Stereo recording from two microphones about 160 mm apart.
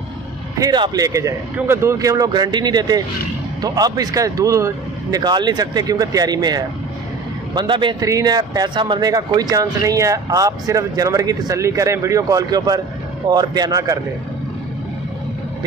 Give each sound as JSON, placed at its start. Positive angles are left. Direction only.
{"t": 0.6, "sound": "speech", "side_deg": -25}